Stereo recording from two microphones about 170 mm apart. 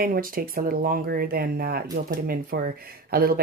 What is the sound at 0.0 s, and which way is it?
Speech, 55° right (ahead or behind).